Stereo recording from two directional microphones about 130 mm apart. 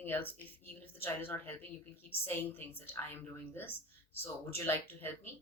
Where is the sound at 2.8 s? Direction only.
15° left (ahead or behind).